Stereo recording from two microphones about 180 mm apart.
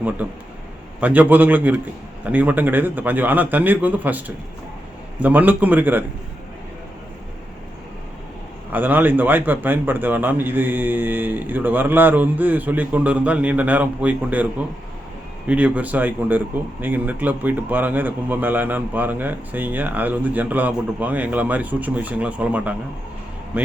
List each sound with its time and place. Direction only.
0.2 s a man's voice: 10° right (ahead or behind)
5.2 s a man's voice: 10° right (ahead or behind)
8.7 s a man's voice: 10° right (ahead or behind)
15.4 s a man's voice: 5° right (ahead or behind)